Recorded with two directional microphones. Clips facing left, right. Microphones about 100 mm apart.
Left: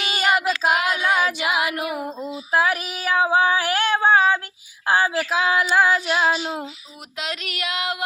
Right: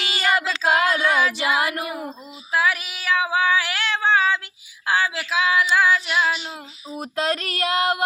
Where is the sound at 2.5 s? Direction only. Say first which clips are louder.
Left 1 dB; 45° left (ahead or behind).